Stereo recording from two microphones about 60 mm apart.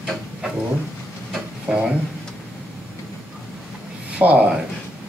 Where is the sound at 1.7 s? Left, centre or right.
Centre.